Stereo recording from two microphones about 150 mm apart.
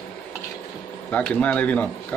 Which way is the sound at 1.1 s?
10° left (ahead or behind).